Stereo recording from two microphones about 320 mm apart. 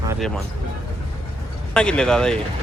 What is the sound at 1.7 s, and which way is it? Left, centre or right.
Speech, centre.